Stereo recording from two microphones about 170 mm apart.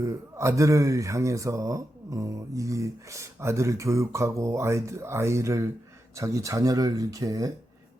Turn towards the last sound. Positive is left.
turn(degrees=-20)  # may be behind; listen again after turning